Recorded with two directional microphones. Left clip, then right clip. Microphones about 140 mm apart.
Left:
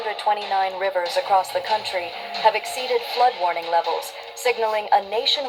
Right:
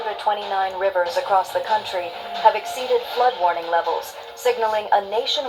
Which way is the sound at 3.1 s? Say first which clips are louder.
Left 1 dB; 30° left (ahead or behind).